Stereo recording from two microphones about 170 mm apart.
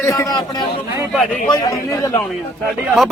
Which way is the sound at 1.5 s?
20° left (ahead or behind).